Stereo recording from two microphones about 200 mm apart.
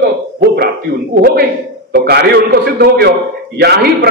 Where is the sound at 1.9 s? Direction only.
55° right (ahead or behind).